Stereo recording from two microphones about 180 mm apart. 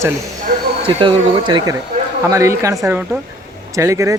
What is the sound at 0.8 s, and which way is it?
Speech, 25° right (ahead or behind).